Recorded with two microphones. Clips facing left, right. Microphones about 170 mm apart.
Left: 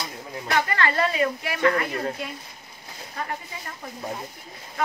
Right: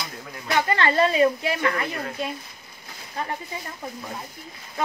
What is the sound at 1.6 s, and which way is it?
Speech, 35° left (ahead or behind).